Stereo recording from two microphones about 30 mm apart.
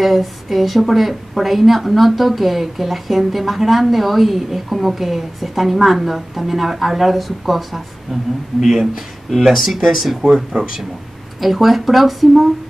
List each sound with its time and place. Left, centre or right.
0.0 s a woman's voice: centre
10.5 s speech: right
11.3 s a woman's voice: centre